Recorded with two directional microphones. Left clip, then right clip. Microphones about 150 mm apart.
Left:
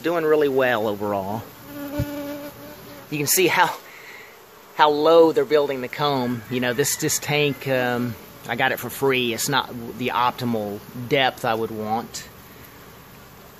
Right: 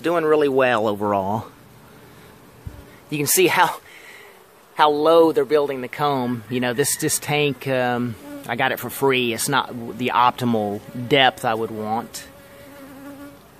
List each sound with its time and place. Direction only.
0.0 s speech: 40° right (ahead or behind)
3.1 s speech: 35° right (ahead or behind)
11.4 s speech: 20° right (ahead or behind)